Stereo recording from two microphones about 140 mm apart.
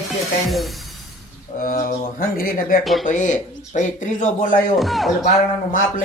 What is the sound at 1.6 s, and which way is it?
Speech, 85° left.